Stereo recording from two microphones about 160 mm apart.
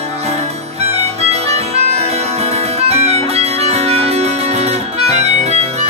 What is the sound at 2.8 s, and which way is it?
Music, 40° right (ahead or behind).